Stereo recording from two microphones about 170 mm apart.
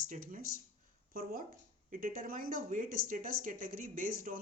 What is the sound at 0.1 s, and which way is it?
Speech, 50° right (ahead or behind).